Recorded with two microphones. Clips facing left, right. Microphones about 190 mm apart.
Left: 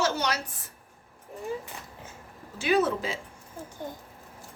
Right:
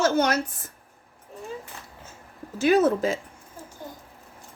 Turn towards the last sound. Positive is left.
turn(degrees=-45)  # may be behind; listen again after turning